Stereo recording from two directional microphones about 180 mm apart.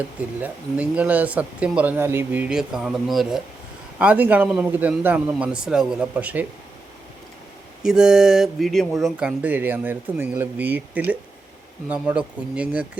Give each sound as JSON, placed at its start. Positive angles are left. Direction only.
{"t": 0.3, "sound": "speech", "side_deg": -10}
{"t": 7.8, "sound": "speech", "side_deg": -5}